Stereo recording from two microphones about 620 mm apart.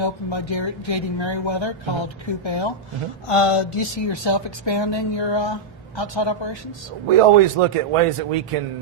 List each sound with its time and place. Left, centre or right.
0.0 s speech: left
7.2 s speech: right